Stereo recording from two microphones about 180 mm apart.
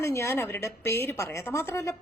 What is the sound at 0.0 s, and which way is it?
A woman's voice, 15° left (ahead or behind).